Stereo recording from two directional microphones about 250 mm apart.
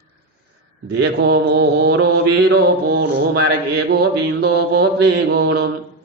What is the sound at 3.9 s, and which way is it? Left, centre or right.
Mantra, right.